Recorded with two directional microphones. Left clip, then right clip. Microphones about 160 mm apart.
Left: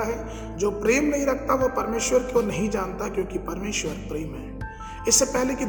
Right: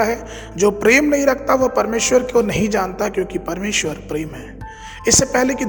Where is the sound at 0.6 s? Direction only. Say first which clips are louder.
Right 9 dB; 55° right (ahead or behind).